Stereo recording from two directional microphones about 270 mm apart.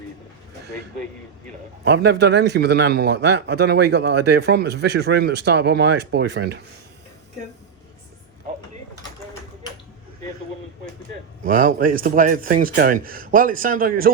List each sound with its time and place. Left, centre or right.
1.8 s a man's voice: right
11.4 s a man's voice: right